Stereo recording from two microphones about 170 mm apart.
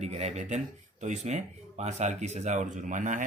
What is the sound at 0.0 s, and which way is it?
Speech, 40° right (ahead or behind).